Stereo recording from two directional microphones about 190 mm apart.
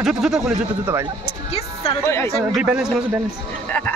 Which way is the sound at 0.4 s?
15° right (ahead or behind).